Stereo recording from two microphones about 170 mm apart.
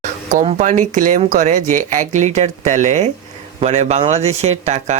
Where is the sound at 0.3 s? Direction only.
45° right (ahead or behind).